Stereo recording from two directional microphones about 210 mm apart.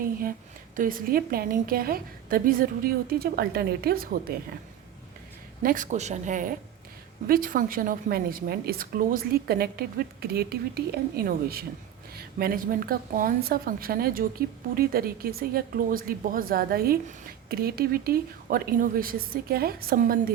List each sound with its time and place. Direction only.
0.0 s a woman's voice: 40° right (ahead or behind)
5.6 s a woman's voice: 40° right (ahead or behind)